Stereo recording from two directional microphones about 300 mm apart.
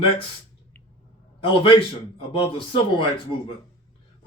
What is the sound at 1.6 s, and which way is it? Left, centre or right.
Speech, centre.